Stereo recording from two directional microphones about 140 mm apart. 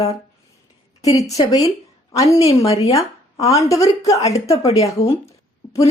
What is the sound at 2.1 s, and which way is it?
Speech, 20° left (ahead or behind).